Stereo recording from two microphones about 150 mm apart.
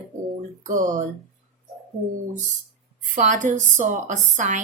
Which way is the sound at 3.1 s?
55° right (ahead or behind).